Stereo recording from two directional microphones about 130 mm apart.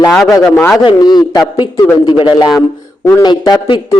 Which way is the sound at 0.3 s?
20° left (ahead or behind).